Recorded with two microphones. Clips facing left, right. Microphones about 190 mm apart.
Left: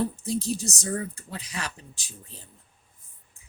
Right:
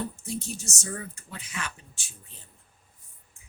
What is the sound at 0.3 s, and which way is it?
Speech, 35° left (ahead or behind).